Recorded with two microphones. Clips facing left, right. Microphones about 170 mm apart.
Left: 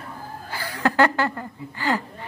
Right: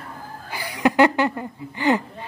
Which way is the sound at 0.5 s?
15° right (ahead or behind).